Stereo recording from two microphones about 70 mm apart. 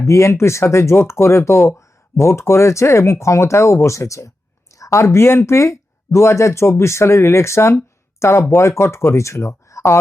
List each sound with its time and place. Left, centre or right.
0.0 s speech: left